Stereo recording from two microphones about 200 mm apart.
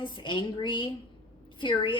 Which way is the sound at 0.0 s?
25° left (ahead or behind).